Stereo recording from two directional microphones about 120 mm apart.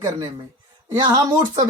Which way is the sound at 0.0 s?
30° right (ahead or behind).